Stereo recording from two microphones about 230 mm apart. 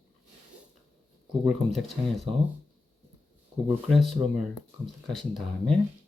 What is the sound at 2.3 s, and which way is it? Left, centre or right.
Speech, right.